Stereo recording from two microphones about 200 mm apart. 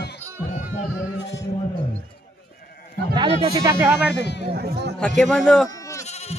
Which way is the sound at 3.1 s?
20° right (ahead or behind).